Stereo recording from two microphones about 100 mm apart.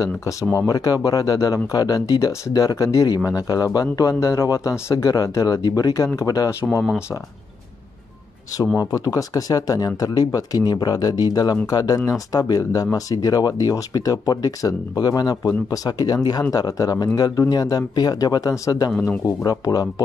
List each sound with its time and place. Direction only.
0.7 s speech: 40° left (ahead or behind)
8.7 s speech: 35° left (ahead or behind)
18.9 s speech: centre (ahead or behind)
19.2 s speech: 40° left (ahead or behind)